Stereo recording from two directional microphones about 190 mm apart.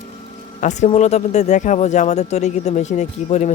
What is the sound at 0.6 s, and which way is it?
Speech, 40° left (ahead or behind).